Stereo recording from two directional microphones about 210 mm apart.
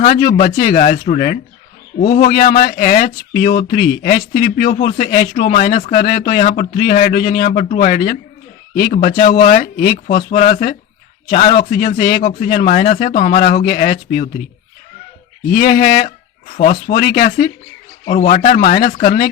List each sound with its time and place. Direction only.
0.1 s speech: 45° left (ahead or behind)
15.4 s speech: 45° left (ahead or behind)